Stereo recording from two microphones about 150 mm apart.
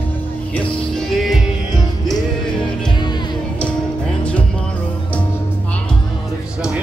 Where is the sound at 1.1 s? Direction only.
Centre (ahead or behind).